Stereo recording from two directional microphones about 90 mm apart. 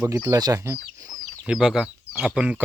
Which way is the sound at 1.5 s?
5° right (ahead or behind).